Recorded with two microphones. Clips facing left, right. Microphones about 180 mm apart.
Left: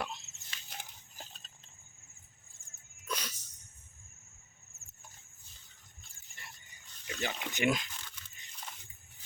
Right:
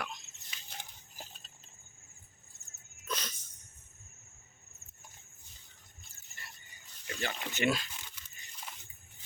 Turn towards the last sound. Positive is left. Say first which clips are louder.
# even
turn(degrees=15)  # may be behind; listen again after turning